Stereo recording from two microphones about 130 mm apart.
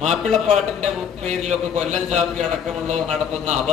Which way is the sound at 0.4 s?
60° right (ahead or behind).